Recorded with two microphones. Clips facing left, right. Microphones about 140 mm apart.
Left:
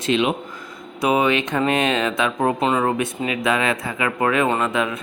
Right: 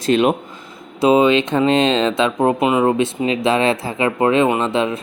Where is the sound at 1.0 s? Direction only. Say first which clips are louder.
Right 6 dB; 25° right (ahead or behind).